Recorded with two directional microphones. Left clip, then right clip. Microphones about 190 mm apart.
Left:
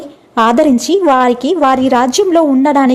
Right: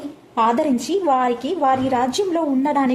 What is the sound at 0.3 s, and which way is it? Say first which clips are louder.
A woman's voice: left 8 dB; 45° left (ahead or behind).